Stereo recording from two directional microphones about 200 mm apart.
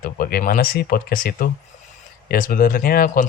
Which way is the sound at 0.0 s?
50° left (ahead or behind).